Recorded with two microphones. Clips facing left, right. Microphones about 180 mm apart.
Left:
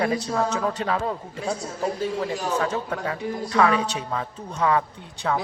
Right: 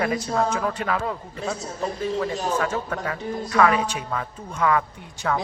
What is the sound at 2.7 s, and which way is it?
Speech, 20° left (ahead or behind).